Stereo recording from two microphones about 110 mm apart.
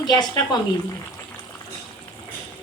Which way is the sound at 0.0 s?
40° left (ahead or behind).